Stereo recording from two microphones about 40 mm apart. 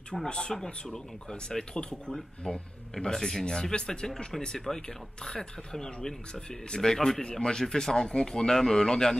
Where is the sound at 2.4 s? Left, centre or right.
Centre.